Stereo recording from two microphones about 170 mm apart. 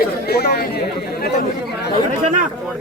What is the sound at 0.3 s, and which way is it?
Speech, 70° left (ahead or behind).